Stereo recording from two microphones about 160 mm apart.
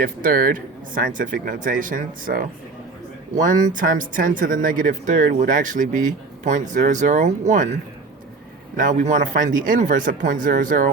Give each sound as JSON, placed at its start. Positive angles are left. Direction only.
{"t": 0.0, "sound": "speech", "side_deg": -65}
{"t": 8.7, "sound": "speech", "side_deg": -50}